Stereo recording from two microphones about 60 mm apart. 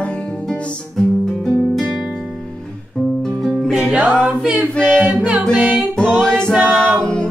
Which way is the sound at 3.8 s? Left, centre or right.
Right.